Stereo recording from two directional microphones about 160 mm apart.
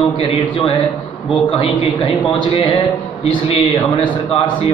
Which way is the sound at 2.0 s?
30° left (ahead or behind).